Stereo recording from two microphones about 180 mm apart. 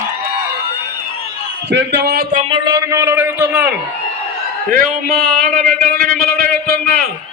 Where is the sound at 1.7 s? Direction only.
60° right (ahead or behind).